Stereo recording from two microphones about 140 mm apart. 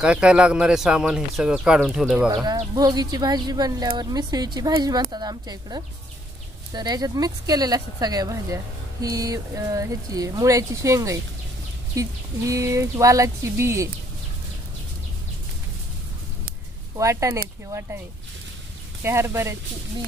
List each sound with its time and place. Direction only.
0.0 s speech: 5° right (ahead or behind)
2.4 s speech: 25° right (ahead or behind)
16.9 s speech: 20° right (ahead or behind)
19.0 s speech: 20° right (ahead or behind)